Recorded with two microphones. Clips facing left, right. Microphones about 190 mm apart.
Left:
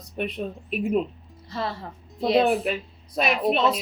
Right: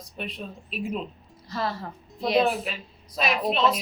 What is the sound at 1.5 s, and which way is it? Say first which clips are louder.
Speech: even; 25° left (ahead or behind).